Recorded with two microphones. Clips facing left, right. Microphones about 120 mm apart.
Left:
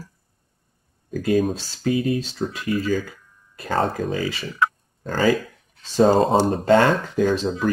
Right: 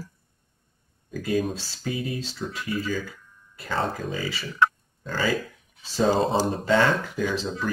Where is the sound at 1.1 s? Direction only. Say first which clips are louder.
Left 5 dB; 50° left (ahead or behind).